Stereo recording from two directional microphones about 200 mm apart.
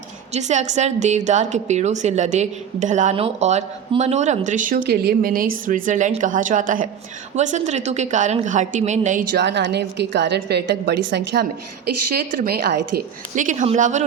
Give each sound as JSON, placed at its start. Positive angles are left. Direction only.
{"t": 0.3, "sound": "a woman's voice", "side_deg": -35}
{"t": 9.4, "sound": "a woman's voice", "side_deg": -60}
{"t": 13.3, "sound": "a woman's voice", "side_deg": -40}